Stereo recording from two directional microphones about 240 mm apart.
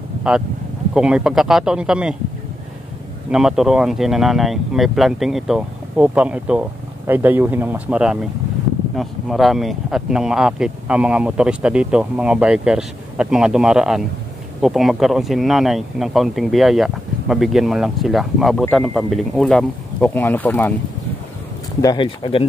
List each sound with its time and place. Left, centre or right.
0.3 s speech: centre
3.3 s speech: centre
21.8 s speech: centre